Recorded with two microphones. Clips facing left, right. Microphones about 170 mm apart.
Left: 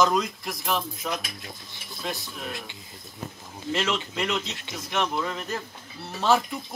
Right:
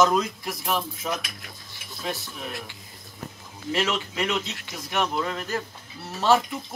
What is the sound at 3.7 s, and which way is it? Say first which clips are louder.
Speech: right 1 dB; 5° right (ahead or behind).